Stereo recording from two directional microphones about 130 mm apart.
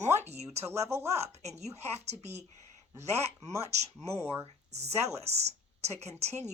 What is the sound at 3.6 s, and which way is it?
Speech, 55° right (ahead or behind).